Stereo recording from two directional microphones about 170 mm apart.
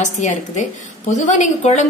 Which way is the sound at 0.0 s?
45° left (ahead or behind).